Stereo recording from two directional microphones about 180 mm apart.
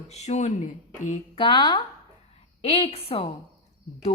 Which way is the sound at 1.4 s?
25° left (ahead or behind).